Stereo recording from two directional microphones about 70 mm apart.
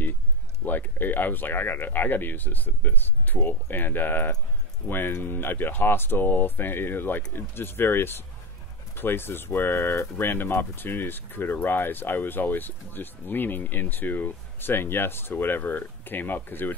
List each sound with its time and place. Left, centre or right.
0.7 s speech: left